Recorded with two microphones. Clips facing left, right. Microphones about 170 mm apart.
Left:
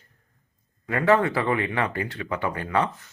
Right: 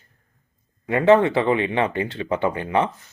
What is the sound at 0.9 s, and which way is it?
Speech, 20° right (ahead or behind).